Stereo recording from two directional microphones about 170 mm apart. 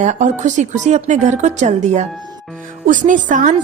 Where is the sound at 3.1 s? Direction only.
50° right (ahead or behind).